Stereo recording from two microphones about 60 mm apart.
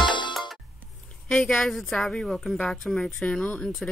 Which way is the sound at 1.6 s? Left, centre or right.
Centre.